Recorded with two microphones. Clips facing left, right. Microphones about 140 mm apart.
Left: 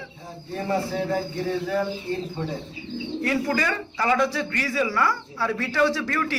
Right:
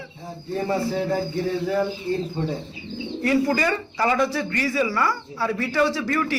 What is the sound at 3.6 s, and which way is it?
A man's voice, 5° right (ahead or behind).